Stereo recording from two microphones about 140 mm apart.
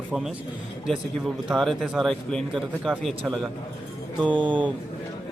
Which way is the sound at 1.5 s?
Centre (ahead or behind).